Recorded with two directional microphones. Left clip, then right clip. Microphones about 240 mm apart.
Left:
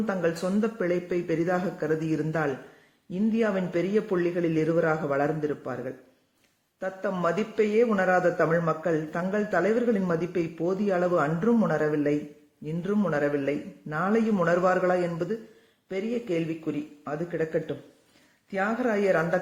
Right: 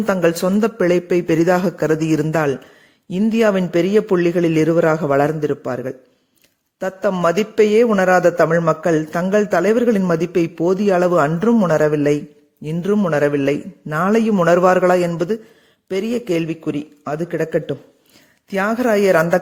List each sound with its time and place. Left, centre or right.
0.0 s a man's voice: right